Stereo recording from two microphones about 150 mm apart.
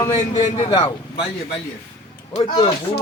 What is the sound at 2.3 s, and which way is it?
Speech, 30° left (ahead or behind).